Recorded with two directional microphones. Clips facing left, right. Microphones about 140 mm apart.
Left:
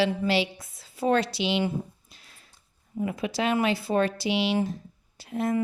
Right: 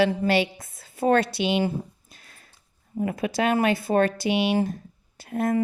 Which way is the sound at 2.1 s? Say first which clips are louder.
Right 3 dB; 50° right (ahead or behind).